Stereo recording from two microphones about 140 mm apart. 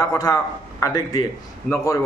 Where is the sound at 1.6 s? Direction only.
20° left (ahead or behind).